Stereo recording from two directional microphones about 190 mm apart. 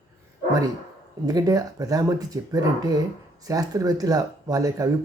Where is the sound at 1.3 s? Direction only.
20° right (ahead or behind).